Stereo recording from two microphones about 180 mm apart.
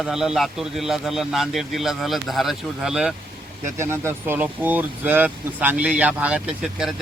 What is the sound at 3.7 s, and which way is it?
Speech, 15° right (ahead or behind).